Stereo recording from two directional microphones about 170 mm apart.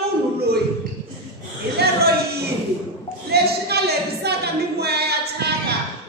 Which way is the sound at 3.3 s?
70° right (ahead or behind).